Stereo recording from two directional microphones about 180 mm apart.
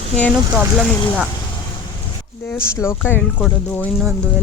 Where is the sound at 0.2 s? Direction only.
5° left (ahead or behind).